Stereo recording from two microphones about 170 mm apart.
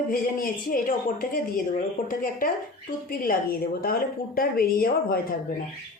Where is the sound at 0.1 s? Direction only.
55° left (ahead or behind).